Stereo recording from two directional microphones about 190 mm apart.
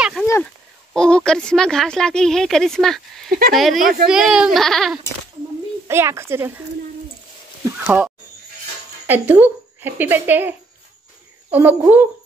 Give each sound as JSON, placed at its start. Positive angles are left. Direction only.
{"t": 0.9, "sound": "speech", "side_deg": 5}
{"t": 3.3, "sound": "speech", "side_deg": -50}
{"t": 3.5, "sound": "speech", "side_deg": 0}
{"t": 5.9, "sound": "speech", "side_deg": -15}
{"t": 7.8, "sound": "speech", "side_deg": -10}
{"t": 11.5, "sound": "speech", "side_deg": -10}